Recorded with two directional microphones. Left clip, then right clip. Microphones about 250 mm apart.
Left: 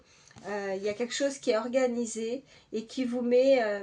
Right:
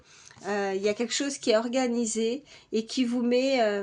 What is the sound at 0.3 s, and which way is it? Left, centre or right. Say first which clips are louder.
Speech: right 4 dB; right.